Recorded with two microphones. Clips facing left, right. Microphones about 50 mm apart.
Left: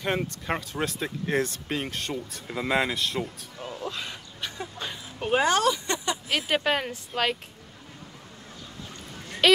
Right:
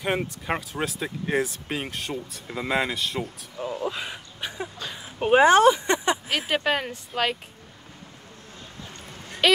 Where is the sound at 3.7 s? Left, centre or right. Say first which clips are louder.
Right 4 dB; centre.